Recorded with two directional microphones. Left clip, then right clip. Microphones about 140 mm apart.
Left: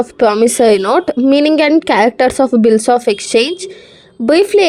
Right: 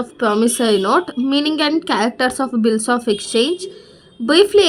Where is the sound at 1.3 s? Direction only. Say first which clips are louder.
Left 9 dB; 35° left (ahead or behind).